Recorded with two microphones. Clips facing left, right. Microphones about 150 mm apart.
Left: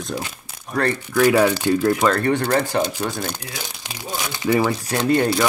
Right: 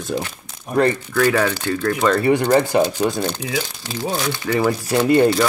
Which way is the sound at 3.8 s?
15° left (ahead or behind).